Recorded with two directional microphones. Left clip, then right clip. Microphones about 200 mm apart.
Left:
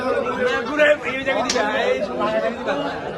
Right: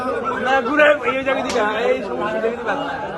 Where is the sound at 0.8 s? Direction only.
25° right (ahead or behind).